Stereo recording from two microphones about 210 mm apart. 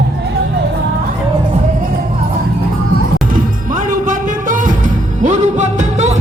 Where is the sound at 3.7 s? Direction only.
40° right (ahead or behind).